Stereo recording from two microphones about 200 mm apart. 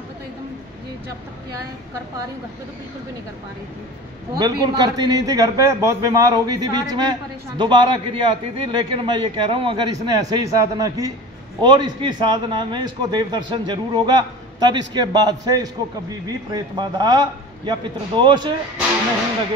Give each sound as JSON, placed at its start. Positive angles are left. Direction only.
{"t": 4.4, "sound": "a man's voice", "side_deg": -20}